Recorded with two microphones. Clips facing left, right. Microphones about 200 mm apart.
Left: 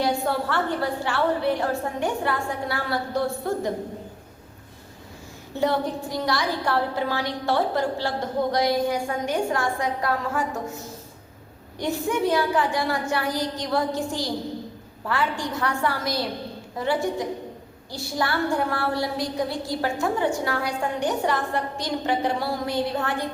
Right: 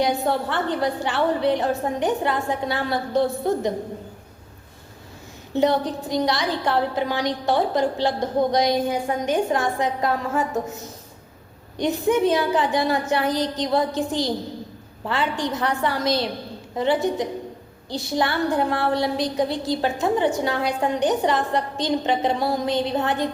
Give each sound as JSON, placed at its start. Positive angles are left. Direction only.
{"t": 0.0, "sound": "a woman's voice", "side_deg": -20}
{"t": 5.5, "sound": "a woman's voice", "side_deg": -20}
{"t": 11.8, "sound": "a woman's voice", "side_deg": -20}